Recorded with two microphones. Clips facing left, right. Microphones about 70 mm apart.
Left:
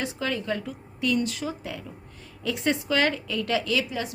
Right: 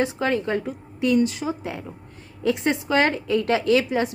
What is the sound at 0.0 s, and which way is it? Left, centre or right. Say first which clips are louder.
A woman's voice: right 7 dB; right.